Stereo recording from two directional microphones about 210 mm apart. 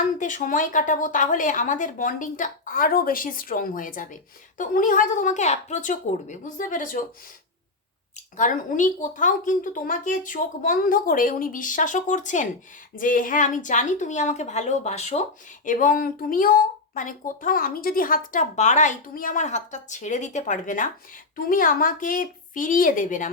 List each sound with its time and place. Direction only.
0.0 s a woman's voice: 35° left (ahead or behind)
8.4 s a woman's voice: 40° left (ahead or behind)